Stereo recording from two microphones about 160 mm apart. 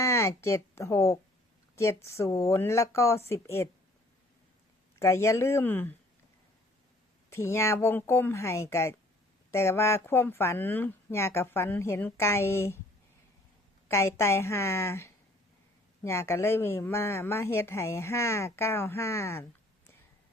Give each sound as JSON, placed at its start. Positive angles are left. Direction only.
{"t": 0.0, "sound": "a woman's voice", "side_deg": 20}
{"t": 4.9, "sound": "speech", "side_deg": 15}
{"t": 7.3, "sound": "speech", "side_deg": 15}
{"t": 13.8, "sound": "speech", "side_deg": 15}